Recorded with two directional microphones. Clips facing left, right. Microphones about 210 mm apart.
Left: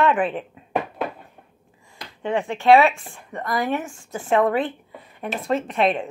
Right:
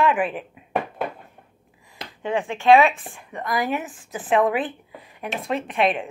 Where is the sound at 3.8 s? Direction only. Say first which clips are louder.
Left 1 dB; 20° right (ahead or behind).